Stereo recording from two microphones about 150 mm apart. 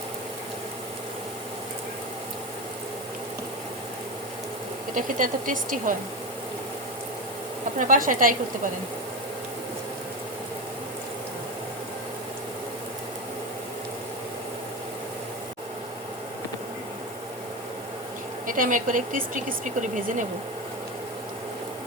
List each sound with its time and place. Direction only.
4.9 s speech: 60° right (ahead or behind)
7.8 s speech: 65° right (ahead or behind)
18.4 s speech: 65° right (ahead or behind)